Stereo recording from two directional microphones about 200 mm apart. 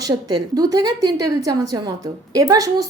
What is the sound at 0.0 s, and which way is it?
A woman's voice, 20° right (ahead or behind).